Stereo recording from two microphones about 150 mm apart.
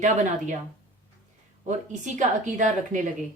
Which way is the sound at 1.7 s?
55° right (ahead or behind).